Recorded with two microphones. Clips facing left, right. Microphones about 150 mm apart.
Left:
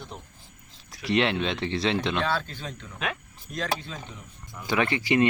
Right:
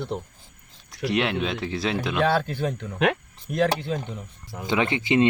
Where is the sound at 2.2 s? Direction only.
60° right (ahead or behind).